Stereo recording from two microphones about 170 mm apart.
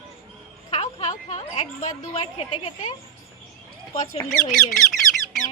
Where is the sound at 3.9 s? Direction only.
45° left (ahead or behind).